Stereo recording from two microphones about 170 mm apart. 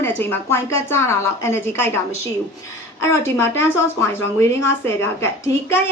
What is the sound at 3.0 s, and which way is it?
Speech, 15° left (ahead or behind).